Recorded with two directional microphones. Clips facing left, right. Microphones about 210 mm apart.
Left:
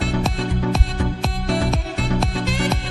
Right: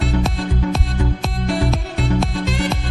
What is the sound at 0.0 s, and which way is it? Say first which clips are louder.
Music: right 1 dB; centre (ahead or behind).